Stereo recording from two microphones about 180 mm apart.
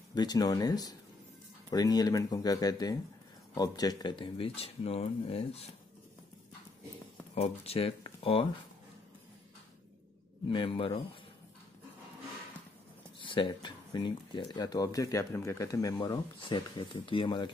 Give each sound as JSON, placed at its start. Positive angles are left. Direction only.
{"t": 0.1, "sound": "speech", "side_deg": 20}
{"t": 7.3, "sound": "speech", "side_deg": 35}
{"t": 10.5, "sound": "speech", "side_deg": 30}
{"t": 13.2, "sound": "speech", "side_deg": 25}